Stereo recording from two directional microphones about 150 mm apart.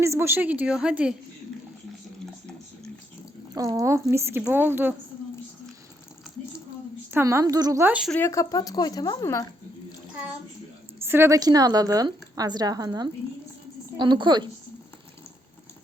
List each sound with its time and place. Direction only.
0.0 s speech: 15° right (ahead or behind)
3.5 s speech: 25° right (ahead or behind)
7.1 s a woman's voice: 15° right (ahead or behind)
8.1 s speech: 15° left (ahead or behind)
11.0 s a woman's voice: 15° right (ahead or behind)